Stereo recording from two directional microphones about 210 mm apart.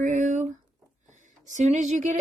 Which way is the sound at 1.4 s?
35° right (ahead or behind).